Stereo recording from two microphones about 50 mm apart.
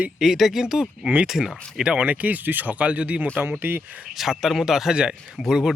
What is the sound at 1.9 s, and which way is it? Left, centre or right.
Speech, right.